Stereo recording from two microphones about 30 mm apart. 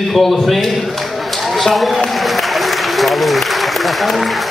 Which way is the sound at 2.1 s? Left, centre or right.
Centre.